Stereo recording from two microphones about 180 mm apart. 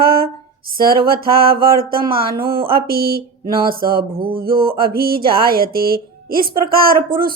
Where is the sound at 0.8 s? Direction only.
55° right (ahead or behind).